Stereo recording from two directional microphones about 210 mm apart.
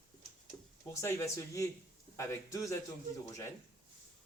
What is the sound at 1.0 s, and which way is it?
A man's voice, 15° left (ahead or behind).